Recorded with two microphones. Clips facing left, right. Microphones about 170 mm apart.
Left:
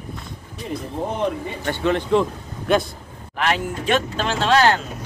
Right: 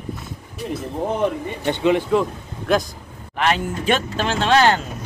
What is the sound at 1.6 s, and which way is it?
Speech, 15° right (ahead or behind).